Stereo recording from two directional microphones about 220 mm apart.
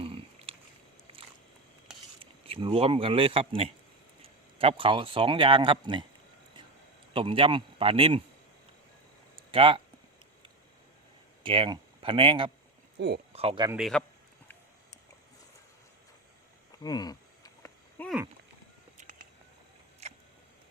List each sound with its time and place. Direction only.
0.0 s a sound: 25° right (ahead or behind)
2.1 s speech: 25° right (ahead or behind)
7.1 s a man's voice: 25° right (ahead or behind)
9.5 s a man's voice: 25° right (ahead or behind)
11.4 s speech: 25° right (ahead or behind)
13.0 s speech: 45° right (ahead or behind)
13.3 s a man's voice: 25° right (ahead or behind)
13.7 s speech: centre (ahead or behind)
16.8 s a sound: 15° left (ahead or behind)
18.9 s a sound: 35° right (ahead or behind)